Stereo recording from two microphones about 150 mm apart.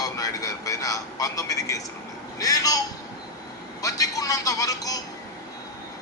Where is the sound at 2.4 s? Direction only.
25° left (ahead or behind).